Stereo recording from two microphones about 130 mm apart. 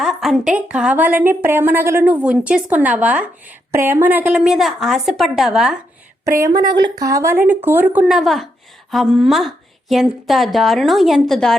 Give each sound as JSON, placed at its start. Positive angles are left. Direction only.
{"t": 0.0, "sound": "a sound", "side_deg": 0}
{"t": 0.5, "sound": "a woman's voice", "side_deg": -5}
{"t": 6.2, "sound": "speech", "side_deg": -25}
{"t": 8.1, "sound": "a woman's voice", "side_deg": 0}